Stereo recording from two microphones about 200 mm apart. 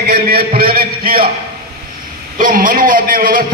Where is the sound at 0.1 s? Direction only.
50° right (ahead or behind).